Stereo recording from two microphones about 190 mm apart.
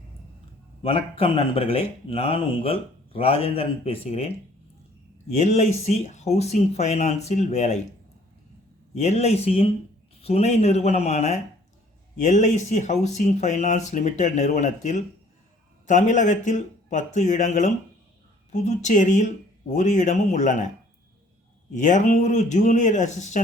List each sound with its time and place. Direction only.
0.8 s speech: 30° left (ahead or behind)
5.4 s speech: 40° left (ahead or behind)
9.0 s speech: 35° left (ahead or behind)
21.8 s speech: 40° left (ahead or behind)